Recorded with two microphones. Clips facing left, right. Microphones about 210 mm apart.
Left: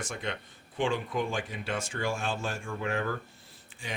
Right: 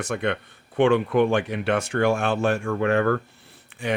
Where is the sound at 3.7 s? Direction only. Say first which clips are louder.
Right 12 dB; 65° right (ahead or behind).